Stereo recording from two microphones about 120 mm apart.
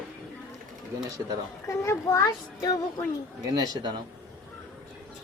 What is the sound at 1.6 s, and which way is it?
Child singing, 25° left (ahead or behind).